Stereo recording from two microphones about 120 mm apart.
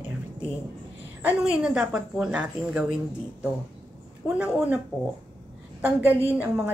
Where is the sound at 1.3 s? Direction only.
10° right (ahead or behind).